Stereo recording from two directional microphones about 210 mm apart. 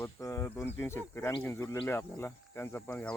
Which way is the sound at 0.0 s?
15° left (ahead or behind).